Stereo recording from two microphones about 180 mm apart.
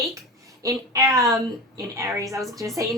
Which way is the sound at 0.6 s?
20° right (ahead or behind).